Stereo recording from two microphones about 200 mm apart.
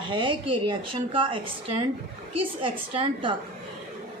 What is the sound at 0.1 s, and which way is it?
A woman's voice, 25° right (ahead or behind).